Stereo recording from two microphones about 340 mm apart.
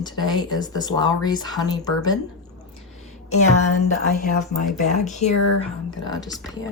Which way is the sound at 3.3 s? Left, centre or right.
Left.